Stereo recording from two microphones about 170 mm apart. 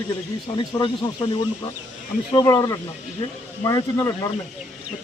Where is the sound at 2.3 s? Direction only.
20° left (ahead or behind).